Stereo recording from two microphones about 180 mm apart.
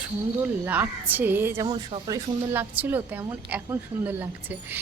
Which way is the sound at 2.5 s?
10° right (ahead or behind).